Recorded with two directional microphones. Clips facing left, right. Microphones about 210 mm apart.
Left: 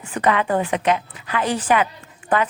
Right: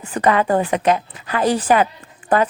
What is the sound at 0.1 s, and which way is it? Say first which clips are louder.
A woman's voice: right 3 dB; 40° right (ahead or behind).